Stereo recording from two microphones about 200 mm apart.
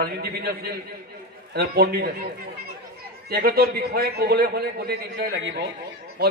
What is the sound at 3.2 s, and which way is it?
A man's voice, 50° right (ahead or behind).